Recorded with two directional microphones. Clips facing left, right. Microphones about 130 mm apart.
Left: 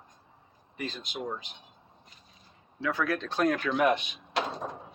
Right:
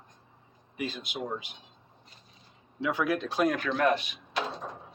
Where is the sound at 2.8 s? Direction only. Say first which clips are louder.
Right 1 dB; 15° right (ahead or behind).